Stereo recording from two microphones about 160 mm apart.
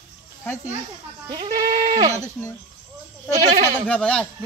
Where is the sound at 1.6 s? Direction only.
55° right (ahead or behind).